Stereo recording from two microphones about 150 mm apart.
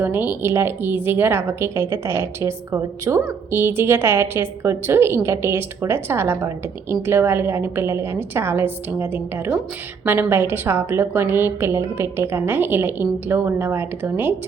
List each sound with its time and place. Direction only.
0.0 s a woman's voice: 15° right (ahead or behind)